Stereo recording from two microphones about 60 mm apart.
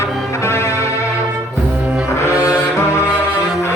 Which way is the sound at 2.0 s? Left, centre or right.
Left.